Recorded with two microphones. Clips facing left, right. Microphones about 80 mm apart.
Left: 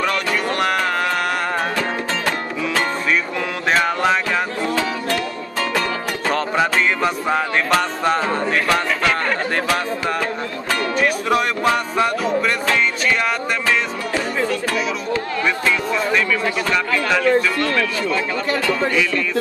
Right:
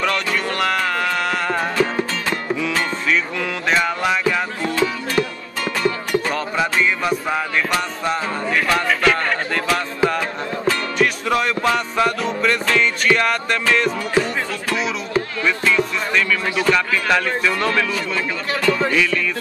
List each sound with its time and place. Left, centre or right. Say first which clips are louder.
0.0 s music: left 1 dB; left
3.6 s music: left 2 dB; left
6.2 s music: left 3 dB; left
8.6 s music: right 1 dB; left
10.7 s music: left 1 dB; left
11.3 s music: right 1 dB; centre
13.1 s music: right 2 dB; centre
15.4 s music: right 2 dB; centre
17.1 s speech: left 3 dB; centre